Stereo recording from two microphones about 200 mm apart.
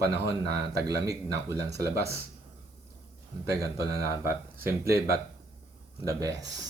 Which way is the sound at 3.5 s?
15° right (ahead or behind).